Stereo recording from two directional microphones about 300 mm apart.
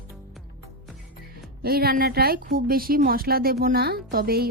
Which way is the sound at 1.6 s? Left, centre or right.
Right.